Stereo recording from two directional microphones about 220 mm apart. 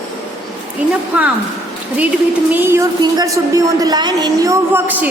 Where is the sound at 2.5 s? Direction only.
10° right (ahead or behind).